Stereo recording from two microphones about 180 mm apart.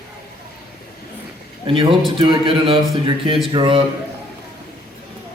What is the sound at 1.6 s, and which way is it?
A man's voice, 30° right (ahead or behind).